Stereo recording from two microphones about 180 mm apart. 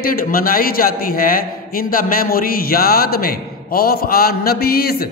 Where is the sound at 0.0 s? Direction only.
55° left (ahead or behind).